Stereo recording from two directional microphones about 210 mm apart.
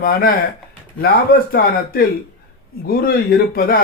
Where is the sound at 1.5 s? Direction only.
45° left (ahead or behind).